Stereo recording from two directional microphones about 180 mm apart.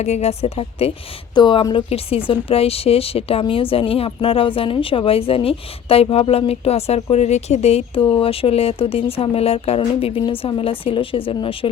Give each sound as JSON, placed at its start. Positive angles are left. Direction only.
{"t": 0.0, "sound": "speech", "side_deg": 35}